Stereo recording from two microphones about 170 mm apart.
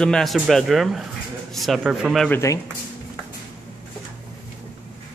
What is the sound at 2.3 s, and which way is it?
Speech, 15° left (ahead or behind).